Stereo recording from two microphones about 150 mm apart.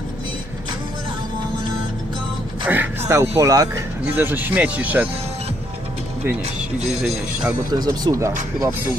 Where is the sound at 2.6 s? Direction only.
10° right (ahead or behind).